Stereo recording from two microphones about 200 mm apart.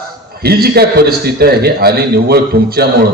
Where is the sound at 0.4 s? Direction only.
50° right (ahead or behind).